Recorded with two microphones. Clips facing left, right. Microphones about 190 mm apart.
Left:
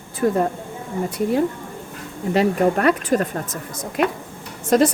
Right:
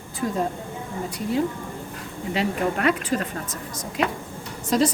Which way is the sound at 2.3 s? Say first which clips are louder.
Left 7 dB; 45° left (ahead or behind).